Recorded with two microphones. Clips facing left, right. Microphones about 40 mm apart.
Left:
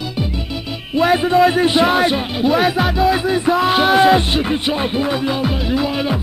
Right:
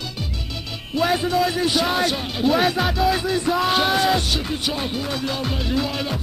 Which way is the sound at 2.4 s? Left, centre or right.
Centre.